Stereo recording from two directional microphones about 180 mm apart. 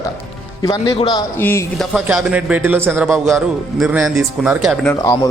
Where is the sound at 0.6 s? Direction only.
20° left (ahead or behind).